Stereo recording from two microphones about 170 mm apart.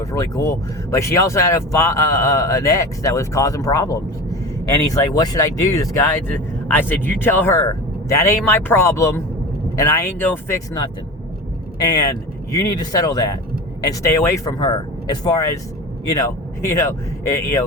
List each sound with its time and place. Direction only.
0.0 s speech: 20° left (ahead or behind)
11.8 s speech: 20° left (ahead or behind)